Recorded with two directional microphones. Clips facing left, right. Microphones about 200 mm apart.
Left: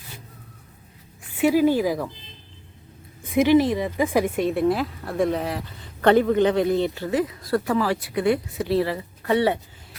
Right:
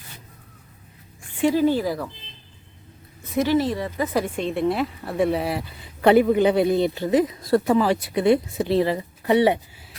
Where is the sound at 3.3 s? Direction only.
15° left (ahead or behind); by 9.6 s 15° right (ahead or behind).